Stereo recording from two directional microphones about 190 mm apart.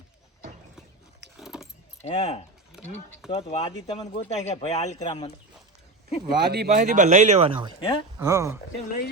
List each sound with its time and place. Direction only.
1.4 s keys jangling: centre (ahead or behind)
2.0 s speech: 35° left (ahead or behind)
2.8 s speech: centre (ahead or behind)
3.2 s speech: 30° left (ahead or behind)
6.2 s speech: 55° right (ahead or behind)
6.7 s speech: 40° right (ahead or behind)
7.8 s speech: 25° left (ahead or behind)
8.2 s speech: 15° right (ahead or behind)